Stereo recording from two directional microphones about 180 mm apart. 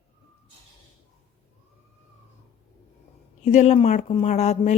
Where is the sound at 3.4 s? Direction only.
40° left (ahead or behind).